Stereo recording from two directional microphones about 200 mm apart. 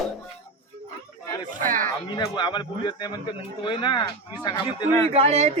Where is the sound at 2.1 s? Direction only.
20° left (ahead or behind).